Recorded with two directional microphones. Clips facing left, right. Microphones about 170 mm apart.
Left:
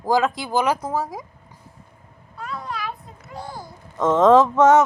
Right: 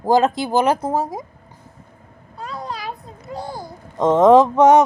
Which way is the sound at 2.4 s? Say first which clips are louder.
Right 1 dB; 35° right (ahead or behind).